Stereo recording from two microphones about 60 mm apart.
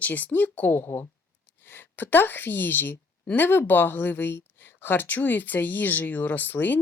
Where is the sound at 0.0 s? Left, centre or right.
Left.